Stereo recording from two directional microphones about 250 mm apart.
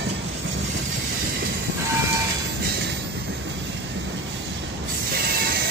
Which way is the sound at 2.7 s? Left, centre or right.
Right.